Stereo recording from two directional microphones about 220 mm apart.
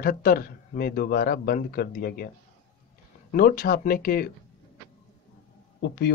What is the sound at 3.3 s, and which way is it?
Speech, 40° left (ahead or behind).